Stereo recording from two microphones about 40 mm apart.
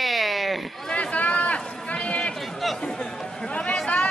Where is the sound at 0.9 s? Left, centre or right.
Left.